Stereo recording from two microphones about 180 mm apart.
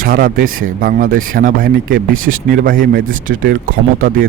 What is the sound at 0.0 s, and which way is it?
Speech, 50° right (ahead or behind).